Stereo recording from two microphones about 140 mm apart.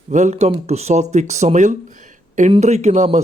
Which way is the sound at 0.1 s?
55° right (ahead or behind).